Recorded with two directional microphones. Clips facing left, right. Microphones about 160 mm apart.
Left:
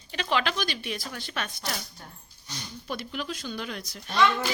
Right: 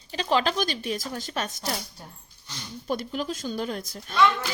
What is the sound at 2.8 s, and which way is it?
Speech, 40° right (ahead or behind).